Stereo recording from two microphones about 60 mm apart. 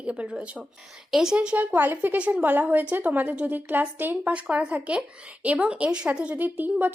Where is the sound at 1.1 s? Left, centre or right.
Centre.